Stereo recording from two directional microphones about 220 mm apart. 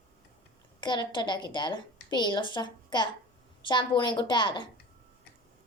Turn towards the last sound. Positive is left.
turn(degrees=20)  # may be behind; listen again after turning